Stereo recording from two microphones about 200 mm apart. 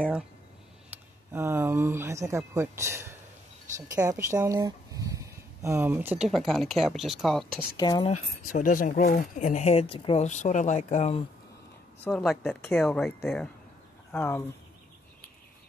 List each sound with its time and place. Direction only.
1.3 s speech: 10° right (ahead or behind)
7.7 s speech: 20° left (ahead or behind)
8.1 s speech: 40° left (ahead or behind)
12.0 s speech: centre (ahead or behind)
14.1 s speech: 10° left (ahead or behind)